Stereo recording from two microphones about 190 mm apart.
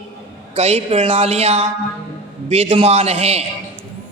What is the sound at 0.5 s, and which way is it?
A man's voice, 35° right (ahead or behind).